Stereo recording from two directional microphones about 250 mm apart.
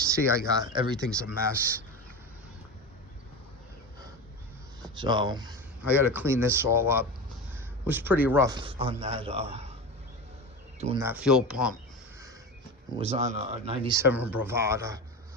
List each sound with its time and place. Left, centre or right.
0.1 s speech: centre
4.9 s speech: centre
10.8 s speech: right
11.0 s speech: centre
13.0 s speech: right